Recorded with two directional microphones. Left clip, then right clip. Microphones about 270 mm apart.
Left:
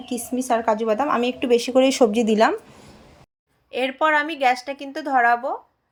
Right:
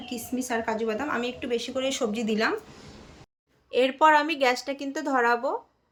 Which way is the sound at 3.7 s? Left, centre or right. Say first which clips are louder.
Even; centre.